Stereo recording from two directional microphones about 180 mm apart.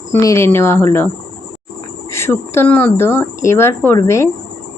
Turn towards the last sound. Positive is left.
turn(degrees=15)  # may be behind; listen again after turning